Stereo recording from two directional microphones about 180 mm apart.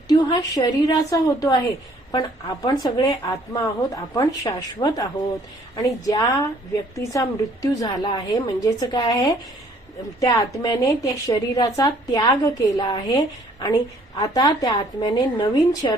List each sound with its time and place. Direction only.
0.1 s a woman's voice: 20° left (ahead or behind)